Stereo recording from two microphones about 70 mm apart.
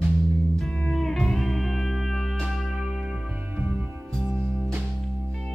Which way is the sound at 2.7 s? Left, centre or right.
Centre.